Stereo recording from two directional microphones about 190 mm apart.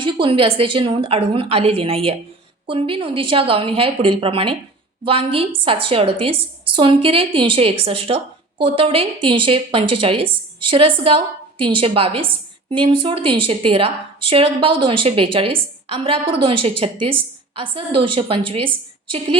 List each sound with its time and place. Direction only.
0.0 s a woman's voice: 25° right (ahead or behind)